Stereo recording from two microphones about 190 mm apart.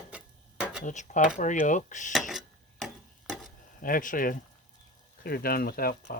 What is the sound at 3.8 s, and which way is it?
Speech, 45° left (ahead or behind).